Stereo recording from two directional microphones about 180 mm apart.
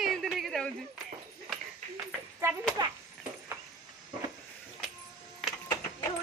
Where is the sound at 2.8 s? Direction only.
25° right (ahead or behind).